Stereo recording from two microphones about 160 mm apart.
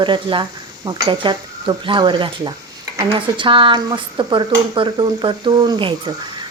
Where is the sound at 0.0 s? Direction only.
30° right (ahead or behind).